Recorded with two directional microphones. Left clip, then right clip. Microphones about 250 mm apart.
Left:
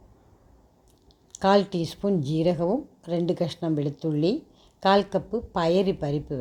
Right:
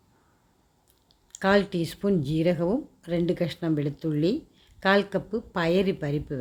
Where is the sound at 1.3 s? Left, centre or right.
Centre.